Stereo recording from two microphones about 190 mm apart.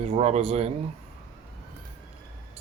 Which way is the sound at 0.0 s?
35° right (ahead or behind).